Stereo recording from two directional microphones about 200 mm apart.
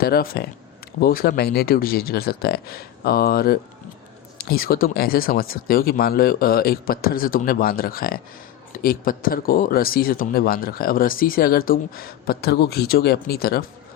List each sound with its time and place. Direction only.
0.0 s speech: 50° left (ahead or behind)